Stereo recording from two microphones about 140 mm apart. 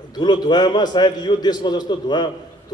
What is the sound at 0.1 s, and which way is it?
A man's voice, 30° left (ahead or behind).